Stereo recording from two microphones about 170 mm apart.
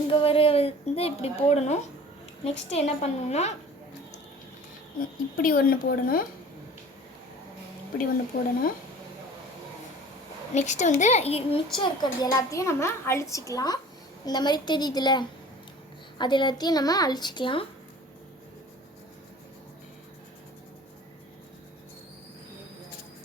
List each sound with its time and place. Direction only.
0.1 s a woman's voice: 35° left (ahead or behind)
4.9 s speech: 55° left (ahead or behind)
10.5 s a woman's voice: 45° left (ahead or behind)
11.8 s a child's voice: 20° left (ahead or behind)